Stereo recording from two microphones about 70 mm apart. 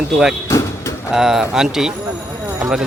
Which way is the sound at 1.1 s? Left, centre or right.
Centre.